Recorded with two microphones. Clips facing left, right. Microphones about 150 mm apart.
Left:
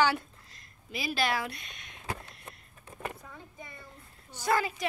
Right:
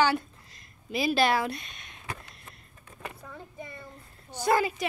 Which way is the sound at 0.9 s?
30° right (ahead or behind).